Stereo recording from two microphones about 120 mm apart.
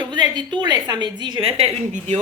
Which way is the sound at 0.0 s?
40° right (ahead or behind).